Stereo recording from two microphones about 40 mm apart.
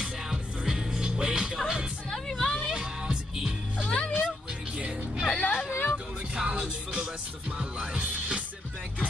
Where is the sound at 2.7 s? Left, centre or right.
Centre.